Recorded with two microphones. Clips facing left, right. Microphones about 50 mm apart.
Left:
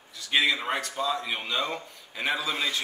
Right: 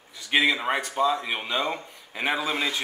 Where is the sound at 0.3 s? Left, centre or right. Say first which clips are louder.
Right 3 dB; right.